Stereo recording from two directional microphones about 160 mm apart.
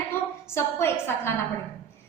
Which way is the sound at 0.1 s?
15° left (ahead or behind).